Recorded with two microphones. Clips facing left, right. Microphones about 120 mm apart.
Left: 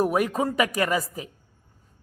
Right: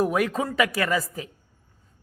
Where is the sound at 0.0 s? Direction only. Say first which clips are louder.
Left 1 dB; 15° left (ahead or behind).